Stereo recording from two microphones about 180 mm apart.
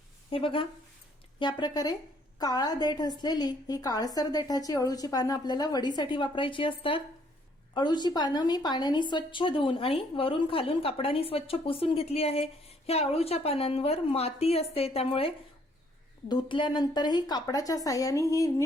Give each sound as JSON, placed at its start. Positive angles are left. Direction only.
{"t": 0.3, "sound": "a woman's voice", "side_deg": 30}
{"t": 16.3, "sound": "a woman's voice", "side_deg": 25}